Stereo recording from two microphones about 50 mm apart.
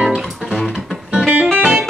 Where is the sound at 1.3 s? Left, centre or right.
Right.